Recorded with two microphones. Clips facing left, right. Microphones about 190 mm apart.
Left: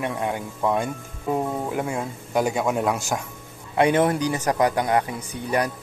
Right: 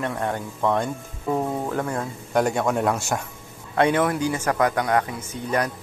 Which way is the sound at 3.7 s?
15° left (ahead or behind).